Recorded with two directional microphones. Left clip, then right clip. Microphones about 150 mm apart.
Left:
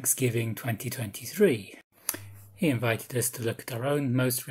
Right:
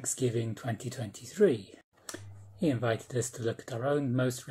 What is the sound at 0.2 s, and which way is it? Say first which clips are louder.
Speech: left 2 dB; 10° left (ahead or behind).